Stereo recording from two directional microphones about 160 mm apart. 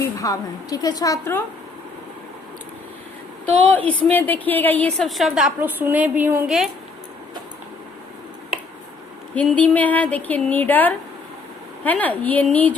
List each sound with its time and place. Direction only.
0.0 s a woman's voice: 20° left (ahead or behind)
3.7 s speech: 10° left (ahead or behind)
4.9 s a woman's voice: centre (ahead or behind)
9.3 s speech: 10° left (ahead or behind)